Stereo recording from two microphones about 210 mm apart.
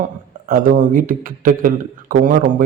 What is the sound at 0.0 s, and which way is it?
A man's voice, 40° right (ahead or behind).